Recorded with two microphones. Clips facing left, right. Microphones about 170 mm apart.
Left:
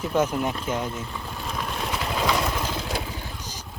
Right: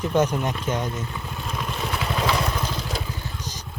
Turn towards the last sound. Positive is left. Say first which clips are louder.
# right 2 dB
turn(degrees=10)  # may be behind; listen again after turning